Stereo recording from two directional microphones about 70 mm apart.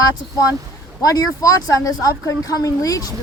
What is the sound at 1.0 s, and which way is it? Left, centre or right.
Speech, left.